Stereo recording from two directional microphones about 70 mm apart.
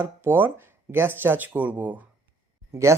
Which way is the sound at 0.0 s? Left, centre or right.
Right.